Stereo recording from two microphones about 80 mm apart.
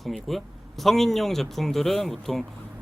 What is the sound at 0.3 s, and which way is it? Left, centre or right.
Speech, centre.